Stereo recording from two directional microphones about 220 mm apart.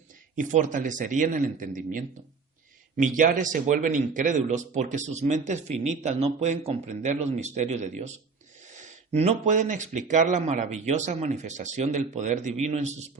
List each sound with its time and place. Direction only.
0.3 s a man's voice: 35° right (ahead or behind)